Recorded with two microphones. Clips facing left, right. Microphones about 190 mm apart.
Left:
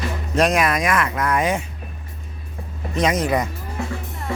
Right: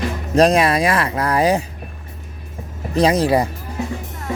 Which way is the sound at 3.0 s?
35° right (ahead or behind).